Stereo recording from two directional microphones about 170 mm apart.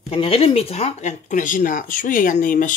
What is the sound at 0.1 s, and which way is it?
Speech, 35° left (ahead or behind).